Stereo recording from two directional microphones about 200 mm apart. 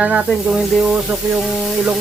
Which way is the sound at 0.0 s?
5° right (ahead or behind).